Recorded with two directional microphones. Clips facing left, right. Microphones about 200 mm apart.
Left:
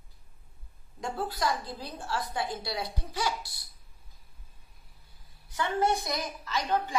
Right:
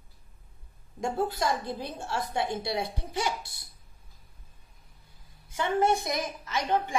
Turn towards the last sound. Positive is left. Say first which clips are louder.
# right 1 dB
turn(degrees=-25)  # may be behind; listen again after turning